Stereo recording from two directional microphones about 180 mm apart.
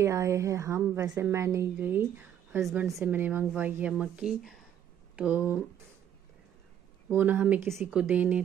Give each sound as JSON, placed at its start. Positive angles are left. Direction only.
{"t": 0.0, "sound": "a woman's voice", "side_deg": -15}
{"t": 7.1, "sound": "a woman's voice", "side_deg": -10}